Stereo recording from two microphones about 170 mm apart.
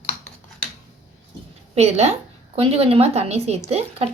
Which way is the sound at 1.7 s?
40° right (ahead or behind).